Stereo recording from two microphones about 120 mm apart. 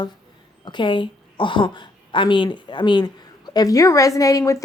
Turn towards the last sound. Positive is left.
turn(degrees=25)  # may be behind; listen again after turning